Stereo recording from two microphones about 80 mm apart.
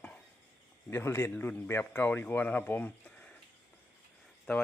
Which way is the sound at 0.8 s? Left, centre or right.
Left.